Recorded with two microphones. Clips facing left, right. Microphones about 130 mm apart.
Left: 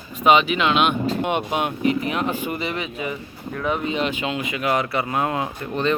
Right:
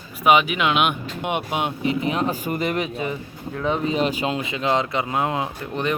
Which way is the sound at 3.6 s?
30° right (ahead or behind).